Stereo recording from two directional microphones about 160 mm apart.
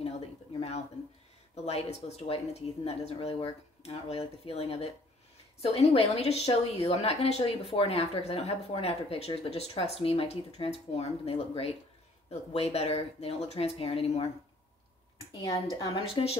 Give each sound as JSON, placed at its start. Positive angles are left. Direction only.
{"t": 0.0, "sound": "a sound", "side_deg": 40}
{"t": 1.5, "sound": "a woman's voice", "side_deg": 40}
{"t": 15.7, "sound": "a woman's voice", "side_deg": 30}